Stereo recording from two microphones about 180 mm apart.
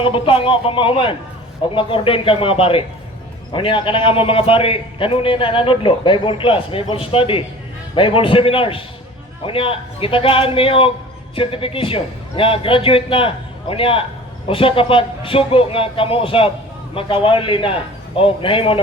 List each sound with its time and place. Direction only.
0.0 s a man's voice: 30° left (ahead or behind)